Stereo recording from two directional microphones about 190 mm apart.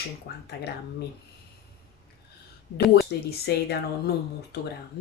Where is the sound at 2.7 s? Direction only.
55° left (ahead or behind).